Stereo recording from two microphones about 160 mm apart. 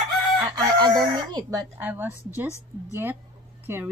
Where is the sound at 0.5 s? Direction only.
25° right (ahead or behind).